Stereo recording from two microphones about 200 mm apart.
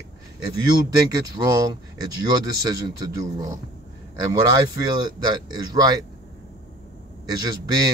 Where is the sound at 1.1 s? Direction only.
20° right (ahead or behind).